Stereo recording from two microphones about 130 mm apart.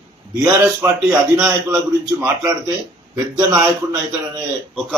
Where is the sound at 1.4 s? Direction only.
25° right (ahead or behind).